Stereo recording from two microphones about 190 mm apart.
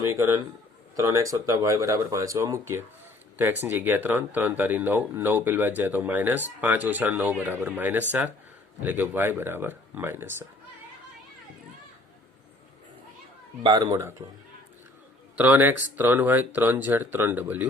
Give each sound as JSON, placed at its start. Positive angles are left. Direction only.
{"t": 0.0, "sound": "speech", "side_deg": -15}
{"t": 13.6, "sound": "speech", "side_deg": -20}
{"t": 15.4, "sound": "speech", "side_deg": -10}